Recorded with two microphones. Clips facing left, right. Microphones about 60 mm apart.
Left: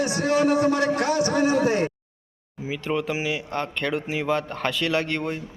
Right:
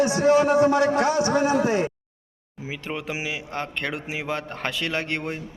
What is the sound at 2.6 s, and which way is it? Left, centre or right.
Speech, centre.